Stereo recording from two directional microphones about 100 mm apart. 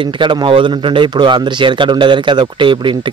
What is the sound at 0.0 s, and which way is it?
Speech, 50° right (ahead or behind).